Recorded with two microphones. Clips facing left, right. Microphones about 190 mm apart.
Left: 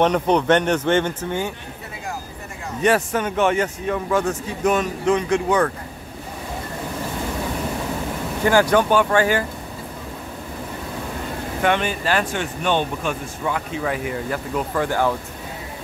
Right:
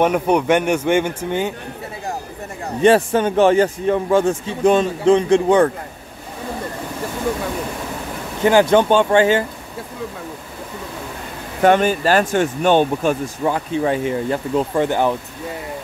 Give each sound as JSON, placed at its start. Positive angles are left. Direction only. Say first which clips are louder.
{"t": 0.0, "sound": "speech", "louder": "right 2 dB", "side_deg": -10}
{"t": 2.8, "sound": "speech", "louder": "right 6 dB", "side_deg": -30}
{"t": 8.5, "sound": "speech", "louder": "right 4 dB", "side_deg": -20}
{"t": 11.6, "sound": "speech", "louder": "right 7 dB", "side_deg": -40}